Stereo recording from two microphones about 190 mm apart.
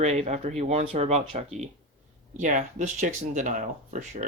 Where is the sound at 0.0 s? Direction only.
35° right (ahead or behind).